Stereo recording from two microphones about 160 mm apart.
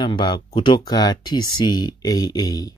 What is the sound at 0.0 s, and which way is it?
Speech, 30° left (ahead or behind).